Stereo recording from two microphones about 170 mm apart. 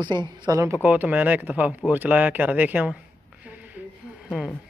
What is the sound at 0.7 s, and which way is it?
Speech, 10° right (ahead or behind).